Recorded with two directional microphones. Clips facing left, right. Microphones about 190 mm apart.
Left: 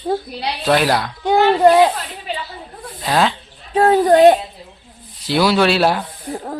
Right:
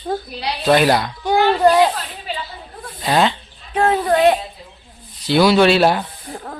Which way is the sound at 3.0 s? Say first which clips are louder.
Right 1 dB; centre (ahead or behind).